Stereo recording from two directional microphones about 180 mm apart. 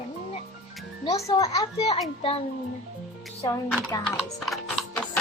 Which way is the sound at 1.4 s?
20° left (ahead or behind).